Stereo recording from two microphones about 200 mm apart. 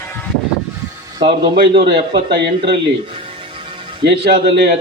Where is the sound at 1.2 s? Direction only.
60° right (ahead or behind).